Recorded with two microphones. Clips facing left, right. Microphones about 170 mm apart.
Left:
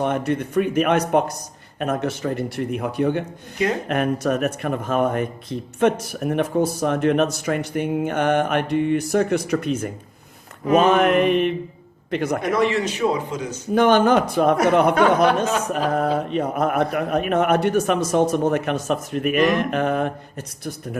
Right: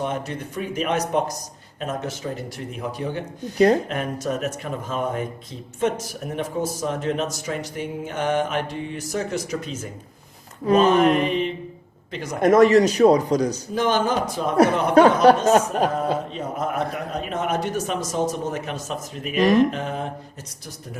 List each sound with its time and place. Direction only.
0.0 s speech: 60° left (ahead or behind)
10.9 s speech: 65° left (ahead or behind)
12.4 s a man's voice: 45° right (ahead or behind)
13.7 s speech: 60° left (ahead or behind)
14.9 s a man's voice: 35° right (ahead or behind)
16.0 s speech: 65° left (ahead or behind)